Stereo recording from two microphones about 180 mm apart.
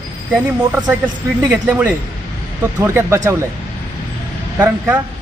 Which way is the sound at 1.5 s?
10° right (ahead or behind).